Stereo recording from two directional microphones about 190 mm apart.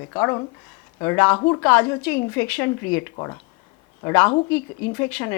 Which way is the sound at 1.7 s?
10° left (ahead or behind).